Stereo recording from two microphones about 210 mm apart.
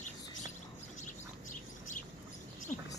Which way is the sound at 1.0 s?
40° left (ahead or behind).